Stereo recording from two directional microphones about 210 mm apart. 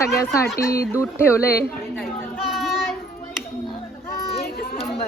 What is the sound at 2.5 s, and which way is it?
Child singing, centre (ahead or behind).